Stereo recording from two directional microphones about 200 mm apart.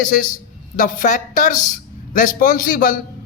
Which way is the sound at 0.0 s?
40° left (ahead or behind).